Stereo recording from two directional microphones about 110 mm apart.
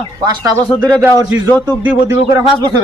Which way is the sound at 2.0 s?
25° right (ahead or behind).